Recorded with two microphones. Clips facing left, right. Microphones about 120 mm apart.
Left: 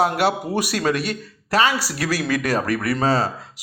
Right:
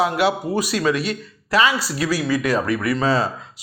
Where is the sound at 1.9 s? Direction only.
60° left (ahead or behind).